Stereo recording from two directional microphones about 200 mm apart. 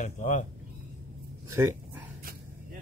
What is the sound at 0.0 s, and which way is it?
Speech, 40° left (ahead or behind).